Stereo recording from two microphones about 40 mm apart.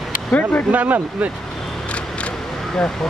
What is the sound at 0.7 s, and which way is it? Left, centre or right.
Speech, right.